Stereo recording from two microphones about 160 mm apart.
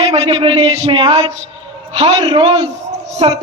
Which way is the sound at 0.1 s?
30° right (ahead or behind).